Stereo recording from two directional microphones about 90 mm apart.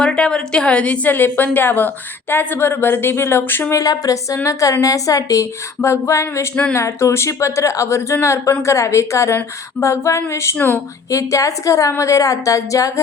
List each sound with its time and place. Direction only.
0.0 s a woman's voice: 10° left (ahead or behind)
3.8 s speech: 40° left (ahead or behind)